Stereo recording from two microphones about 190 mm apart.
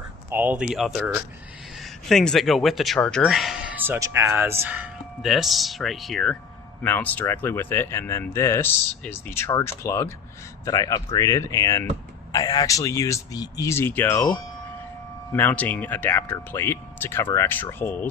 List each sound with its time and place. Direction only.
0.3 s speech: 10° right (ahead or behind); by 18.0 s 10° left (ahead or behind)